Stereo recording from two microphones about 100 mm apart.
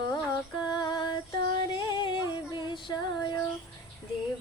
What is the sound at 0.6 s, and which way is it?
Female singing, 50° left (ahead or behind).